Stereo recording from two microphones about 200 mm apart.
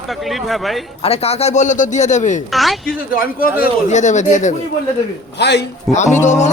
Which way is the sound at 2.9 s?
45° left (ahead or behind).